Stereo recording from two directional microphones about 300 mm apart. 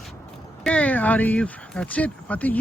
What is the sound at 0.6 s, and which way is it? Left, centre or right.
Speech, centre.